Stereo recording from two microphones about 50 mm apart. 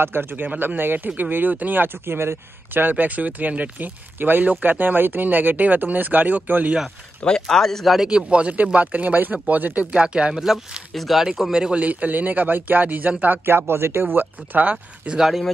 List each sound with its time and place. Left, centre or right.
0.0 s speech: right
7.2 s speech: centre
8.1 s speech: right
9.9 s speech: centre
10.9 s speech: centre
11.5 s speech: centre
11.8 s speech: right
13.5 s speech: right
14.0 s speech: right
15.1 s speech: centre